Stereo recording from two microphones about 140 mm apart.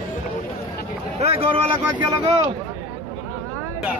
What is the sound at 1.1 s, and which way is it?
Speech, 45° right (ahead or behind).